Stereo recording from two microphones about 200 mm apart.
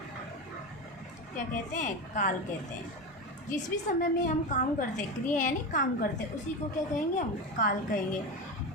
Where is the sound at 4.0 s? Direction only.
40° left (ahead or behind).